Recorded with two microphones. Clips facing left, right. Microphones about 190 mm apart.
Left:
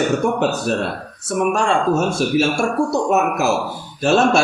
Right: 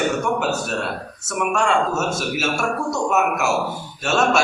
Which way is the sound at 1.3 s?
35° left (ahead or behind).